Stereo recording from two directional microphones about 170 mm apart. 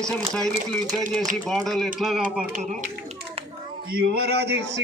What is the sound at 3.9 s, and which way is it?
Speech, 65° right (ahead or behind).